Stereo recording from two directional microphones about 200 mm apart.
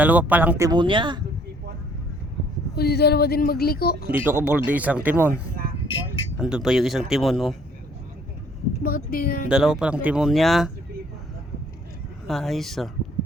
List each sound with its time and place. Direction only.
0.0 s speech: 10° right (ahead or behind); by 1.2 s 25° right (ahead or behind)
2.7 s a woman's voice: 55° left (ahead or behind)
4.1 s speech: 10° right (ahead or behind)
5.3 s a sound: 45° right (ahead or behind)
6.4 s speech: 5° right (ahead or behind)
8.8 s a woman's voice: 45° left (ahead or behind)
9.5 s speech: 5° right (ahead or behind)
12.3 s speech: centre (ahead or behind)